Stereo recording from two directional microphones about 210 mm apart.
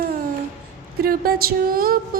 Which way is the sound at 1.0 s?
45° right (ahead or behind).